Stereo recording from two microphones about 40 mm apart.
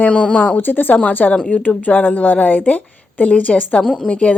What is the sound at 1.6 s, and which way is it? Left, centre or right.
A woman's voice, left.